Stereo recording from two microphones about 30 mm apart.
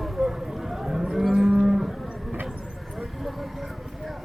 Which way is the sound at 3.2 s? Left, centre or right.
Centre.